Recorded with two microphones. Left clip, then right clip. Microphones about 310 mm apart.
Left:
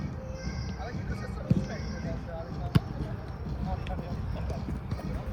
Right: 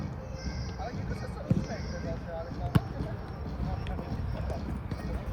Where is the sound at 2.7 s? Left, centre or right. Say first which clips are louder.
Even; centre.